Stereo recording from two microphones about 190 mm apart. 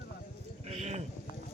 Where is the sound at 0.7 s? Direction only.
35° right (ahead or behind).